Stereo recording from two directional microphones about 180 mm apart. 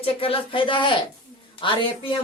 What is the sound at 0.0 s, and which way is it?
Speech, 30° left (ahead or behind).